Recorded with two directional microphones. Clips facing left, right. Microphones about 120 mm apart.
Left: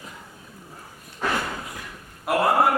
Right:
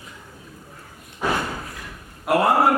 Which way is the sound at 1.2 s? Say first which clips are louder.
Right 2 dB; 10° right (ahead or behind).